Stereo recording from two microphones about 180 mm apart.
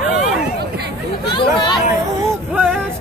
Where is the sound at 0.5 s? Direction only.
65° right (ahead or behind).